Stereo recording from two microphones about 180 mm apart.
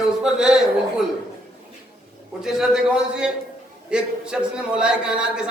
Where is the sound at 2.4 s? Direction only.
5° right (ahead or behind).